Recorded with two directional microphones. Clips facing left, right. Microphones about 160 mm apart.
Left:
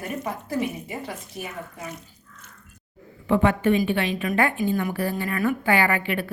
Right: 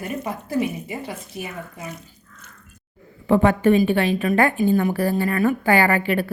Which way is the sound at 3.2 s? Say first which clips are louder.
Right 4 dB; 40° right (ahead or behind).